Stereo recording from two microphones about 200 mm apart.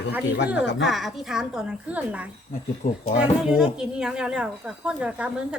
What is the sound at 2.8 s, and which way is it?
Speech, 45° left (ahead or behind).